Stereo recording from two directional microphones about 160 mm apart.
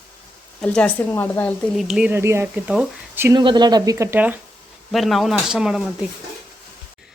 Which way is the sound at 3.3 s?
30° right (ahead or behind).